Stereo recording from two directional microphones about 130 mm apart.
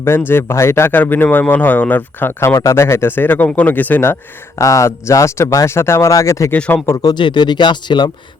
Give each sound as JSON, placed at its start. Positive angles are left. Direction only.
{"t": 0.0, "sound": "speech", "side_deg": 15}
{"t": 6.5, "sound": "speech", "side_deg": 15}
{"t": 6.8, "sound": "speech", "side_deg": 30}